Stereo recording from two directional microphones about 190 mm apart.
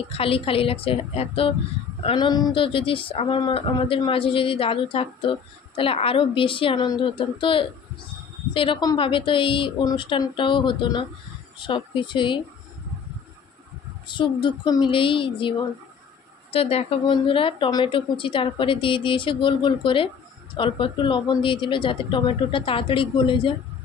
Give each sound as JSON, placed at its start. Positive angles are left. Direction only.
{"t": 0.1, "sound": "speech", "side_deg": 30}
{"t": 14.0, "sound": "speech", "side_deg": 25}
{"t": 16.5, "sound": "speech", "side_deg": 30}